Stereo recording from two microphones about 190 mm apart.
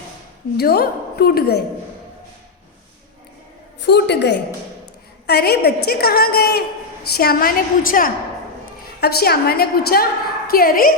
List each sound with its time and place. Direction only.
0.5 s a woman's voice: 55° left (ahead or behind)
3.8 s a woman's voice: 60° left (ahead or behind)